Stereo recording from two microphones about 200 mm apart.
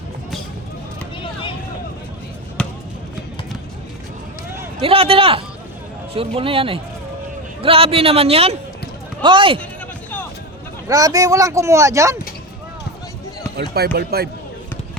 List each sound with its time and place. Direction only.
1.2 s a sound: 25° left (ahead or behind)
2.6 s basketball bounce: 5° left (ahead or behind)
4.8 s a man's voice: 30° right (ahead or behind)
10.8 s speech: 15° right (ahead or behind)
13.6 s speech: 50° right (ahead or behind)